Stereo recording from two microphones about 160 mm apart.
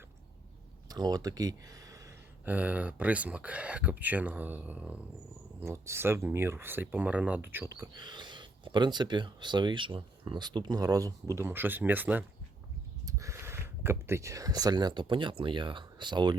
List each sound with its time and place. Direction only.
0.9 s speech: 25° right (ahead or behind)
2.4 s speech: 10° right (ahead or behind)
7.9 s speech: 30° right (ahead or behind)